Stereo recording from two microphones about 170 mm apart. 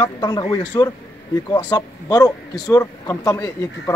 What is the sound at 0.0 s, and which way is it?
Speech, 25° left (ahead or behind).